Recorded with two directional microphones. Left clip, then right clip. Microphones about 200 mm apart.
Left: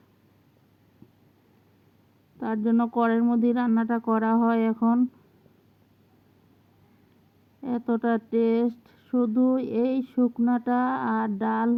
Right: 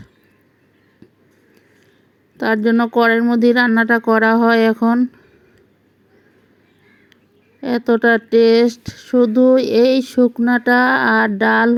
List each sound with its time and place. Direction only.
2.4 s speech: 30° right (ahead or behind)
7.6 s speech: 30° right (ahead or behind)